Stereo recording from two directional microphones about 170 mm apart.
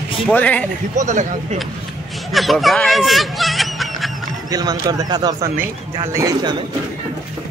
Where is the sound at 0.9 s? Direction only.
45° right (ahead or behind).